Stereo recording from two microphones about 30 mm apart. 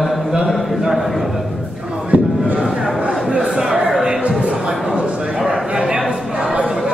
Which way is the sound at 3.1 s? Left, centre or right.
Right.